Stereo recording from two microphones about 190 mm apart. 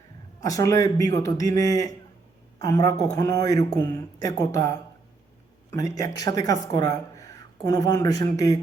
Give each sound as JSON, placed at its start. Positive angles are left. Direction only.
{"t": 0.4, "sound": "a woman's voice", "side_deg": 15}
{"t": 6.0, "sound": "a woman's voice", "side_deg": 20}